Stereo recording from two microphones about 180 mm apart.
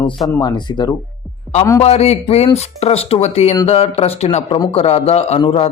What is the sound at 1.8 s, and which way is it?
Speech, 35° left (ahead or behind).